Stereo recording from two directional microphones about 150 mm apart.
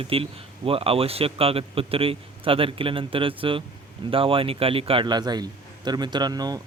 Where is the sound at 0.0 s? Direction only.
35° right (ahead or behind).